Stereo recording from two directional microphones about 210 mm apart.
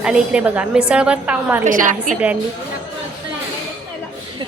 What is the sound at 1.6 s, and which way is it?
Speech, 40° right (ahead or behind).